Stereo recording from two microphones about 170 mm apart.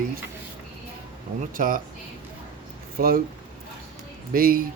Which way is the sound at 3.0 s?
55° right (ahead or behind).